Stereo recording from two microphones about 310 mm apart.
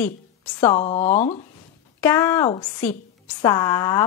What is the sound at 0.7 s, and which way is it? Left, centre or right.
Speech, left.